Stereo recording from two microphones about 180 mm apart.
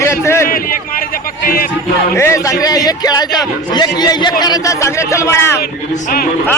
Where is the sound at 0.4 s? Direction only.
55° left (ahead or behind).